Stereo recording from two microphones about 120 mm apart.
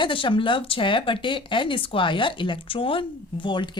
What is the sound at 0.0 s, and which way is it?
Speech, 45° left (ahead or behind).